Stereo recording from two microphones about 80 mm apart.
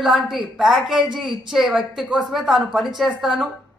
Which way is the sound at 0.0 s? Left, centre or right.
Centre.